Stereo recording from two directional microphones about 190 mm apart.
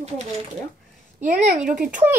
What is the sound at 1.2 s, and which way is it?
Speech, 40° right (ahead or behind).